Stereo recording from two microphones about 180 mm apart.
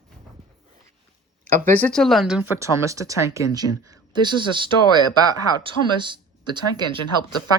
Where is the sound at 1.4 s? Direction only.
10° left (ahead or behind); by 4.7 s 25° right (ahead or behind).